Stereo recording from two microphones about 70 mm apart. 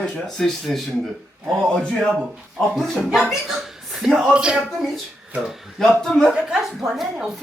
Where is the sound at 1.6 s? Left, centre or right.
Centre.